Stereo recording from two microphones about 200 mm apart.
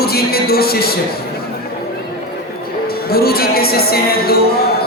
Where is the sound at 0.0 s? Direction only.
50° left (ahead or behind).